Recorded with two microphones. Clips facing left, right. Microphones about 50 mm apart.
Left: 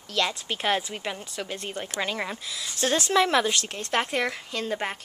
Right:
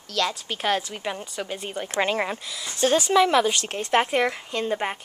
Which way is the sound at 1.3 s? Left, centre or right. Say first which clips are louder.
Right 2 dB; centre.